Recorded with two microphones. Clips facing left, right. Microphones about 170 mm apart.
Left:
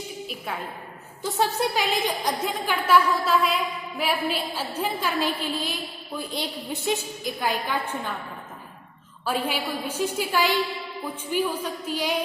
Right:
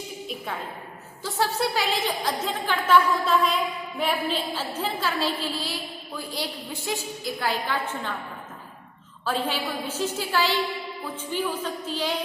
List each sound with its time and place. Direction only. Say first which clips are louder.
1.2 s a woman's voice: left 1 dB; 20° left (ahead or behind)
9.2 s a woman's voice: even; 10° left (ahead or behind)